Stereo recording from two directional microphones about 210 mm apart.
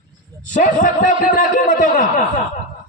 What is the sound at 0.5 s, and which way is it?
A man's voice, 40° left (ahead or behind).